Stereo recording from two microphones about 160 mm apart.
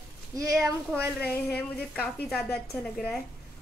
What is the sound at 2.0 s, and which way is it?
Speech, 10° left (ahead or behind).